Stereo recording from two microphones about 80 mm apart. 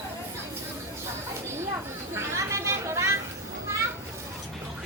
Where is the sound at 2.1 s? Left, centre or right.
Right.